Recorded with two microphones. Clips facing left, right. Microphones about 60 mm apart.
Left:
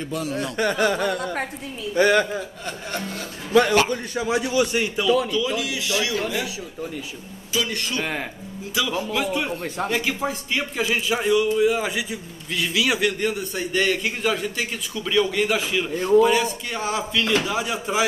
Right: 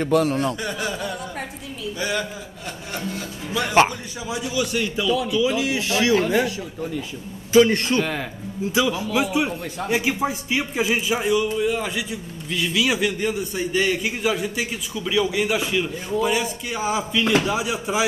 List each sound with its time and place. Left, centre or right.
0.0 s speech: right
0.6 s a sound: left
2.0 s a man's voice: left
3.5 s a man's voice: left
4.6 s a man's voice: left
5.3 s a man's voice: centre
5.6 s a man's voice: right
7.5 s a man's voice: right
8.0 s speech: centre
8.8 s a man's voice: right
9.1 s a man's voice: centre